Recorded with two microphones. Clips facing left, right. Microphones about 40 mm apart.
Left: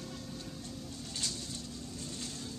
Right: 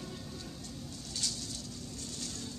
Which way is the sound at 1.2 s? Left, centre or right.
Left.